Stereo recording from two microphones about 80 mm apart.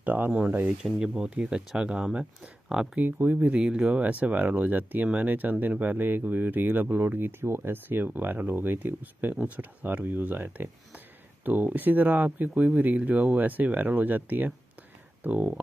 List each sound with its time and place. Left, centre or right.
0.0 s speech: right
3.0 s speech: right
3.3 s speech: centre